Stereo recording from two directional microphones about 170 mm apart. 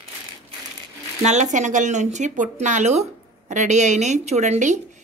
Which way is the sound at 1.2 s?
45° right (ahead or behind).